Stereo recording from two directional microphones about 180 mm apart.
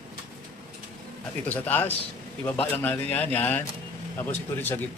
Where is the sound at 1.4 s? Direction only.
10° left (ahead or behind).